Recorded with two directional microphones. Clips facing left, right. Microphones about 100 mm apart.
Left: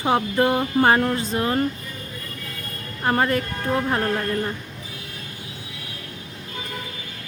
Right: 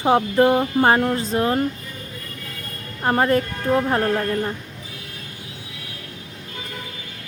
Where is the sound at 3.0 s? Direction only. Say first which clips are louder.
Right 3 dB; 30° right (ahead or behind).